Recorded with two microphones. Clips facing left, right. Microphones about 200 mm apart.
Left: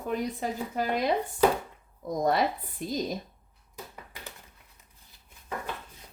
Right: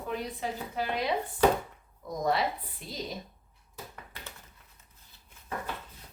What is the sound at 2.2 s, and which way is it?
Speech, 50° left (ahead or behind).